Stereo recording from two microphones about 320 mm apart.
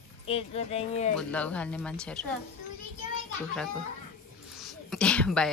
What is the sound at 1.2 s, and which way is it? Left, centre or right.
Speech, centre.